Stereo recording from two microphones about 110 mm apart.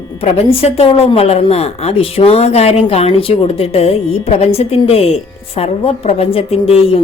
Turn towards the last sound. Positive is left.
turn(degrees=60)  # may be behind; listen again after turning